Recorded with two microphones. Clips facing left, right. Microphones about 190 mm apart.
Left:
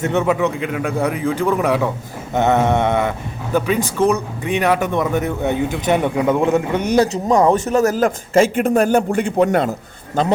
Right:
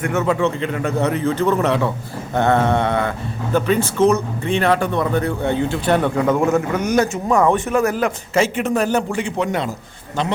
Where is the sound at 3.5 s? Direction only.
10° left (ahead or behind).